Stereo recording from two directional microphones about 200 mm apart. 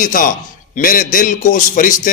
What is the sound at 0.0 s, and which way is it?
A man's voice, 45° left (ahead or behind).